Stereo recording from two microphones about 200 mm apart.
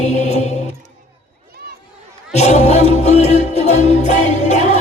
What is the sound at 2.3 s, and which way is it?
Music, 35° left (ahead or behind).